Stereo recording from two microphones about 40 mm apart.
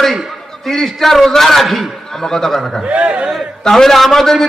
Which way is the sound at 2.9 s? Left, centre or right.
Right.